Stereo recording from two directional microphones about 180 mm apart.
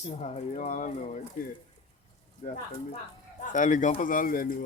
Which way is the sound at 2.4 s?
50° left (ahead or behind).